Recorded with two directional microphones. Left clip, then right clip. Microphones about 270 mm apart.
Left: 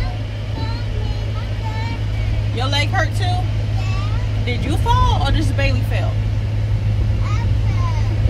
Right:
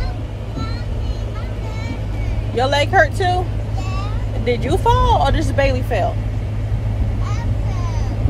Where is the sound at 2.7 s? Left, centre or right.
Right.